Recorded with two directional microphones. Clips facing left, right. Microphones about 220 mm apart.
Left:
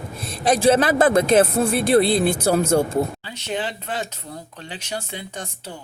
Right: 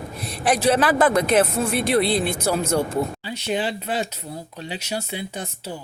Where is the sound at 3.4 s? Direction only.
10° right (ahead or behind).